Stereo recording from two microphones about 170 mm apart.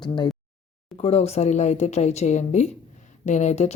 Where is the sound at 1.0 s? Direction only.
40° left (ahead or behind).